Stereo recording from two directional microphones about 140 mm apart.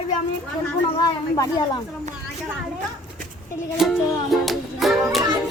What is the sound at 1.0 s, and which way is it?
Speech, 30° left (ahead or behind).